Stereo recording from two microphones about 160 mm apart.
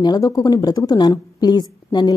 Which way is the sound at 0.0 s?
25° left (ahead or behind).